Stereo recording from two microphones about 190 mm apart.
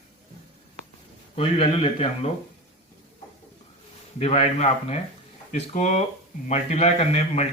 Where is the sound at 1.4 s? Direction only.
30° left (ahead or behind).